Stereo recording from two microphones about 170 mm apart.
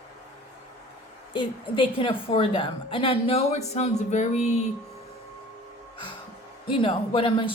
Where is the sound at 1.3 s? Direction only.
30° left (ahead or behind).